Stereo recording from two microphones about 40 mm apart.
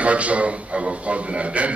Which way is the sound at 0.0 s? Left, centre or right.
Right.